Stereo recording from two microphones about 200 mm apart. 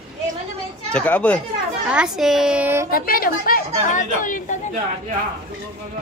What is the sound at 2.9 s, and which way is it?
A woman's voice, 45° left (ahead or behind).